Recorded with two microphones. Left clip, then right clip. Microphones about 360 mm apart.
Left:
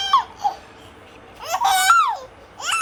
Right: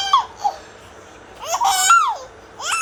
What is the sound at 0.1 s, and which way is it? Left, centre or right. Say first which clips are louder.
Laughter: right 1 dB; centre.